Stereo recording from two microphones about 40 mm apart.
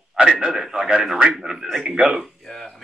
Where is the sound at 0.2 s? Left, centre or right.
Right.